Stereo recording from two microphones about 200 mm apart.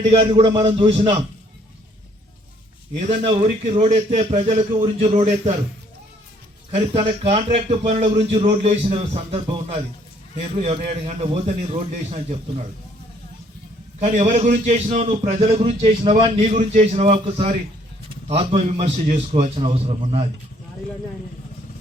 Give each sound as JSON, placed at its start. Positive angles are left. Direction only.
{"t": 0.0, "sound": "a man's voice", "side_deg": -25}
{"t": 3.1, "sound": "a man's voice", "side_deg": -30}
{"t": 6.7, "sound": "a man's voice", "side_deg": -30}
{"t": 14.0, "sound": "a man's voice", "side_deg": -35}